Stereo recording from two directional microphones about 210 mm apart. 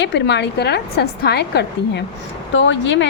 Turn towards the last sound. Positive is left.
turn(degrees=60)  # may be behind; listen again after turning